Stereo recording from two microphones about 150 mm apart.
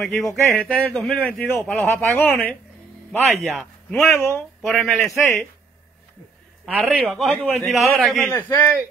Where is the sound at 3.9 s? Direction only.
15° left (ahead or behind).